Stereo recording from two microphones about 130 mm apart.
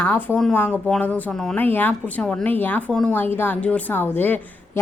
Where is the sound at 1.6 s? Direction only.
15° left (ahead or behind).